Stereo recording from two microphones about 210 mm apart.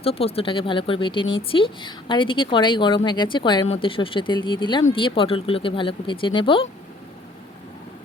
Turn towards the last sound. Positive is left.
turn(degrees=25)  # may be behind; listen again after turning